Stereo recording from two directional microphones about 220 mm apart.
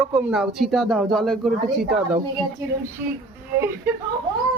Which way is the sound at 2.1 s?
15° right (ahead or behind).